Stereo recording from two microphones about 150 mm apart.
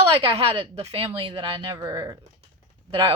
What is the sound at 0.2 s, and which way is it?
Speech, 35° right (ahead or behind).